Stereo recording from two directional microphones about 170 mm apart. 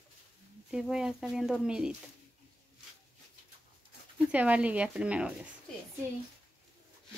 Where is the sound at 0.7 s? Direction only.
5° right (ahead or behind).